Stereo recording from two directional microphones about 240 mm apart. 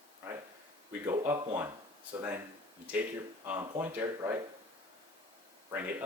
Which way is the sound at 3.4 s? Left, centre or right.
Centre.